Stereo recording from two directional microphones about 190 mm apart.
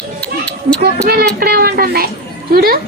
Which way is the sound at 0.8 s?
55° right (ahead or behind).